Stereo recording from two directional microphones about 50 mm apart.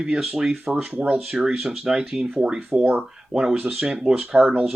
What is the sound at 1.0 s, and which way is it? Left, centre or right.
Speech, right.